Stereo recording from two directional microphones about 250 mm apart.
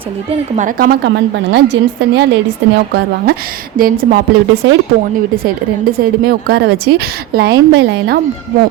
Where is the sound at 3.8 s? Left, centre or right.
Right.